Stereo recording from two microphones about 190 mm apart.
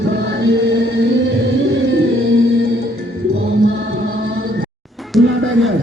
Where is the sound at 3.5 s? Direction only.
55° right (ahead or behind).